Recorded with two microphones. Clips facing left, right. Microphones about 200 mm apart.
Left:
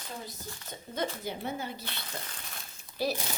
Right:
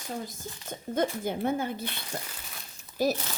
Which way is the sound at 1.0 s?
50° right (ahead or behind).